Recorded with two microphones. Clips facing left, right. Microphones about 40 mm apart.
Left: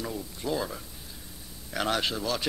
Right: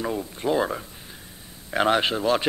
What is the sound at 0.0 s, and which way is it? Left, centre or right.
A man's voice, right.